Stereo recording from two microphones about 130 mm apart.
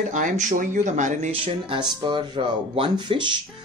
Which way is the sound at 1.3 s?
45° right (ahead or behind).